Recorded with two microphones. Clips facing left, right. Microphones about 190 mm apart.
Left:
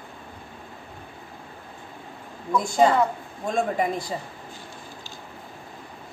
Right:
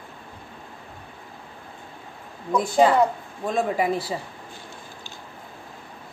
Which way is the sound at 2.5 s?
5° right (ahead or behind).